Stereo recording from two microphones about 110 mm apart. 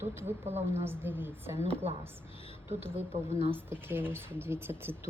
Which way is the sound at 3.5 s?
20° right (ahead or behind).